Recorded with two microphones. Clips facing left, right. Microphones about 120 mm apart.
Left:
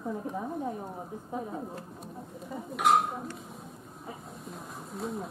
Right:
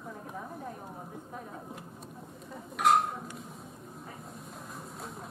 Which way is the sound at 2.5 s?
Centre (ahead or behind).